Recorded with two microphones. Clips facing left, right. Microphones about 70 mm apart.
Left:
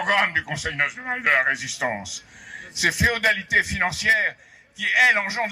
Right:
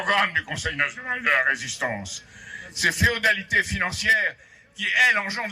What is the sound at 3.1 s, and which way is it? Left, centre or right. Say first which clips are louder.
A man's voice: left 1 dB; left.